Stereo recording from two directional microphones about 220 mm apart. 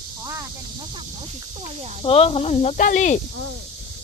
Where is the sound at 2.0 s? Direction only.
25° left (ahead or behind).